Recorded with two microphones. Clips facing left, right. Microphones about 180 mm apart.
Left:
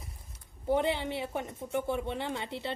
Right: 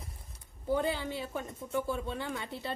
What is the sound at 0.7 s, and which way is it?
Speech, 20° left (ahead or behind).